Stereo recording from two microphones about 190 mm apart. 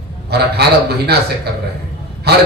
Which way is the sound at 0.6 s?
60° right (ahead or behind).